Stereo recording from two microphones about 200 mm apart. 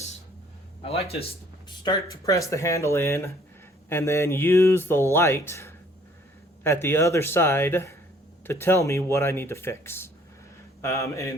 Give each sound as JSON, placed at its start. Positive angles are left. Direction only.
{"t": 0.8, "sound": "speech", "side_deg": 30}
{"t": 1.8, "sound": "speech", "side_deg": 20}